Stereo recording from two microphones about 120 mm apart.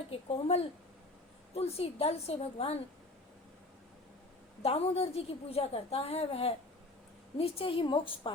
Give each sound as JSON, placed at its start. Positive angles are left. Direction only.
{"t": 0.3, "sound": "a woman's voice", "side_deg": 55}
{"t": 4.6, "sound": "a woman's voice", "side_deg": 55}